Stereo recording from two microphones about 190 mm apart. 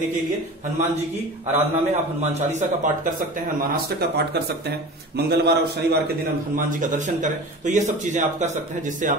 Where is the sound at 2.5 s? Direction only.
40° right (ahead or behind).